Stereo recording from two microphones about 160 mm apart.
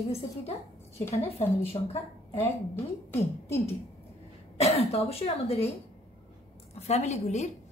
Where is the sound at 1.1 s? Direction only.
40° left (ahead or behind).